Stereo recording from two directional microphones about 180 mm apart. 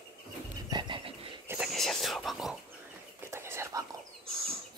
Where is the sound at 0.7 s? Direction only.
25° right (ahead or behind).